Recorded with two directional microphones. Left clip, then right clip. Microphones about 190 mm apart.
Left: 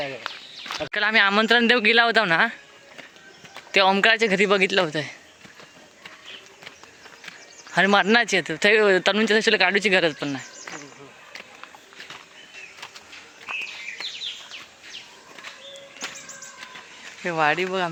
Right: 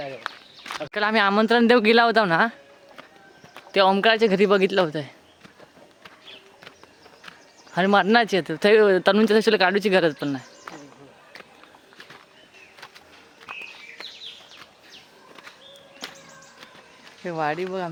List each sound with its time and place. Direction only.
0.9 s speech: 15° right (ahead or behind)
3.7 s speech: 15° right (ahead or behind)
7.3 s speech: 10° right (ahead or behind); by 10.4 s 30° right (ahead or behind)
10.7 s a sound: 5° right (ahead or behind)
17.2 s speech: centre (ahead or behind)